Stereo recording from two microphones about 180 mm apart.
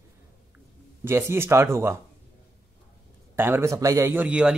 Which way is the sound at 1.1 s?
15° right (ahead or behind).